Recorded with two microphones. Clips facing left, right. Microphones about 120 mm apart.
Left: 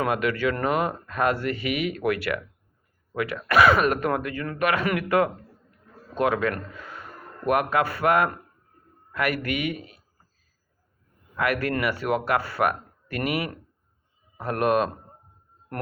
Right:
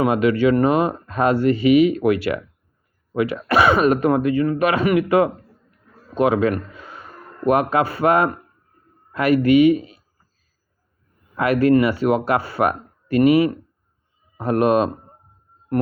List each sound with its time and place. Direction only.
0.0 s speech: 25° right (ahead or behind)
6.7 s a sound: 25° right (ahead or behind)
7.4 s speech: 25° right (ahead or behind)
11.3 s speech: 25° right (ahead or behind)